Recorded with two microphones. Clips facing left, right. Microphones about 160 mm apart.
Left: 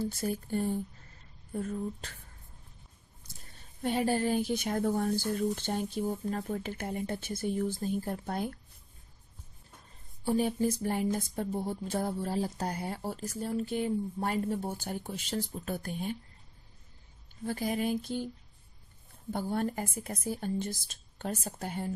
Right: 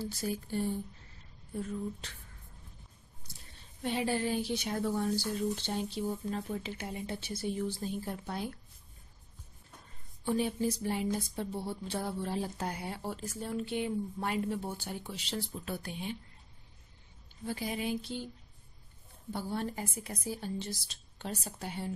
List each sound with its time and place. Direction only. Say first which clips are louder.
0.1 s speech: left 3 dB; 50° left (ahead or behind)
3.8 s speech: left 3 dB; 45° left (ahead or behind)
10.2 s speech: left 3 dB; 40° left (ahead or behind)
17.5 s speech: left 4 dB; 45° left (ahead or behind)
19.3 s speech: left 4 dB; 50° left (ahead or behind)